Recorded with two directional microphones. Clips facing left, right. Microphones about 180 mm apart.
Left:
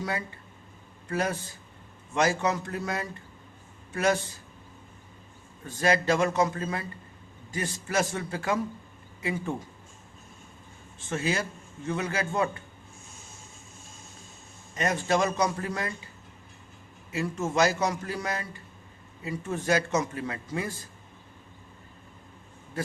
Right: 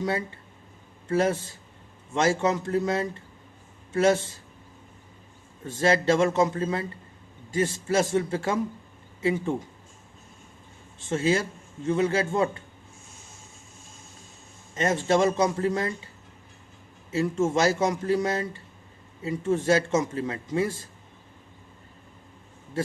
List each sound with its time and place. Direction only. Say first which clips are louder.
0.0 s a man's voice: right 5 dB; 25° right (ahead or behind)
5.6 s a man's voice: right 3 dB; 25° right (ahead or behind)
11.0 s a man's voice: right 5 dB; 25° right (ahead or behind)
14.8 s a man's voice: right 4 dB; 25° right (ahead or behind)
17.1 s a man's voice: right 6 dB; 25° right (ahead or behind)